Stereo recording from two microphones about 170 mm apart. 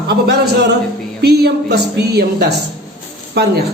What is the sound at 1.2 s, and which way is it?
A man's voice, 70° right (ahead or behind).